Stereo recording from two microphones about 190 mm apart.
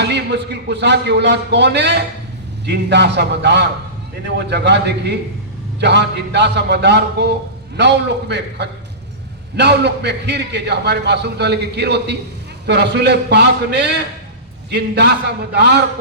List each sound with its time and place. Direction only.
0.0 s a man's voice: 60° right (ahead or behind)